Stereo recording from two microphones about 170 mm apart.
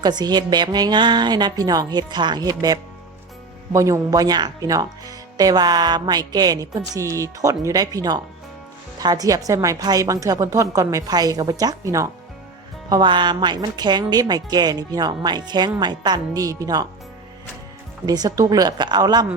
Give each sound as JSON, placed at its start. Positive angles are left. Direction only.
{"t": 0.0, "sound": "speech", "side_deg": -25}
{"t": 18.0, "sound": "speech", "side_deg": -25}